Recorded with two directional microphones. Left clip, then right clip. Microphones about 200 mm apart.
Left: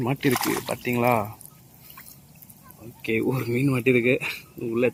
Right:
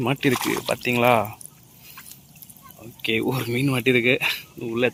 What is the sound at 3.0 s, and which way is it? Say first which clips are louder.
Speech: right 2 dB; centre (ahead or behind).